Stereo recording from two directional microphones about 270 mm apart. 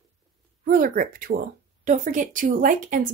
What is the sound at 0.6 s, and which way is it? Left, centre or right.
A woman's voice, right.